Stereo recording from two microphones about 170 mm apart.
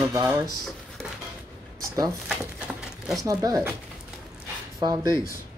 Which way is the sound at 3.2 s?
20° right (ahead or behind).